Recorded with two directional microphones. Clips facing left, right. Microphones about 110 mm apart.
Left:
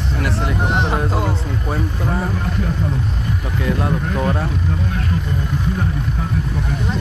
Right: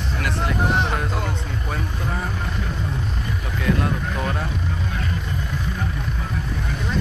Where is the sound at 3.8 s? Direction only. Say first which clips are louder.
Left 4 dB; 25° left (ahead or behind).